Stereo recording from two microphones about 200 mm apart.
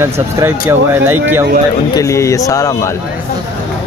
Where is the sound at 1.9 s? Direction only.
15° left (ahead or behind).